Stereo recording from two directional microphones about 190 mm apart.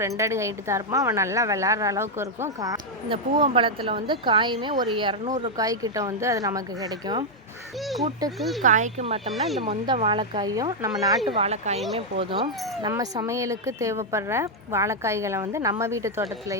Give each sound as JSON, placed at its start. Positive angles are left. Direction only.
{"t": 0.2, "sound": "a woman's voice", "side_deg": -15}
{"t": 8.6, "sound": "speech", "side_deg": -40}
{"t": 11.3, "sound": "speech", "side_deg": -35}
{"t": 12.9, "sound": "a woman's voice", "side_deg": -15}